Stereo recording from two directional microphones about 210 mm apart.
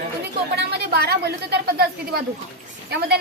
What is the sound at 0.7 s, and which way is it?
Speech, 50° right (ahead or behind).